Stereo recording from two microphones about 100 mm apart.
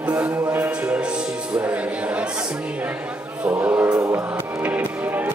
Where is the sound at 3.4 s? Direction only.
20° right (ahead or behind).